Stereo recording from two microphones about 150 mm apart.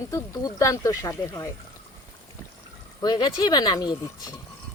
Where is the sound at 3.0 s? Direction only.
30° left (ahead or behind).